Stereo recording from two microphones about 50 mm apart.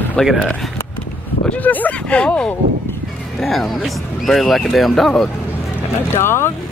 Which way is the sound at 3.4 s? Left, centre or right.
Centre.